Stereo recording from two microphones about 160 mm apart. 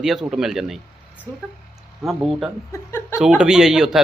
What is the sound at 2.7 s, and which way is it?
Speech, 15° left (ahead or behind).